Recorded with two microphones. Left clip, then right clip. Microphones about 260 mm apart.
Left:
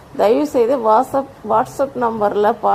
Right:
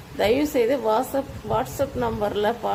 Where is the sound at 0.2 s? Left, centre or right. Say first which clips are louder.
Left 6 dB; centre.